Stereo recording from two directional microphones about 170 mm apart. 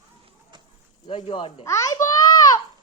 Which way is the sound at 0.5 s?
25° right (ahead or behind).